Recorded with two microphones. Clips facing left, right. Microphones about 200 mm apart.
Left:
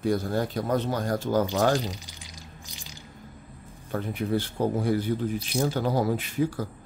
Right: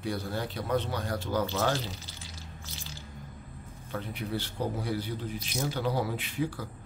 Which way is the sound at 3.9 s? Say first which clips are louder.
Left 7 dB; 50° left (ahead or behind).